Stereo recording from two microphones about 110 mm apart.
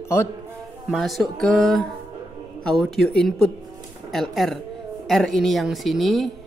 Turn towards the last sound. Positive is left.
turn(degrees=0)  # may be behind; listen again after turning